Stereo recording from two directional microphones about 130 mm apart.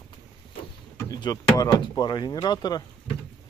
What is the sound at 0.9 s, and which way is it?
Speech, 30° left (ahead or behind).